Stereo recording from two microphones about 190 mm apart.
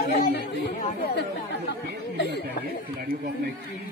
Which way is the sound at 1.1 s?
65° left (ahead or behind).